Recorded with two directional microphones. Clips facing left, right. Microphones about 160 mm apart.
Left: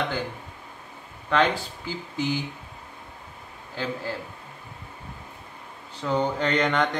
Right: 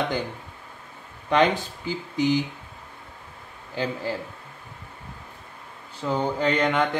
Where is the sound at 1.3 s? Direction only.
15° right (ahead or behind).